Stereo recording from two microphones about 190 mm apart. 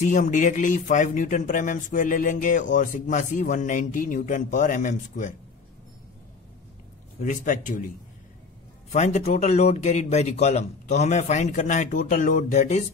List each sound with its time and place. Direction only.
0.0 s speech: 40° left (ahead or behind)
7.2 s speech: 40° left (ahead or behind)
8.9 s speech: 35° left (ahead or behind)